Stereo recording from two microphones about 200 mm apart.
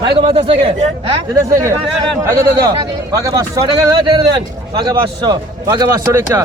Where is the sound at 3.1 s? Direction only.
15° right (ahead or behind).